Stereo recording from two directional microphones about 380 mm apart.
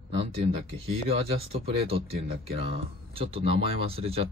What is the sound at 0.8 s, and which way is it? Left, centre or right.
Speech, centre.